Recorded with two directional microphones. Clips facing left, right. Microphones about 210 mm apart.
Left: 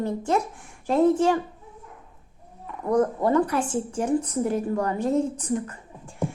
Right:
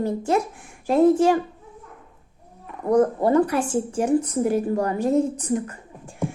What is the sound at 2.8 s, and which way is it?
Speech, 30° right (ahead or behind).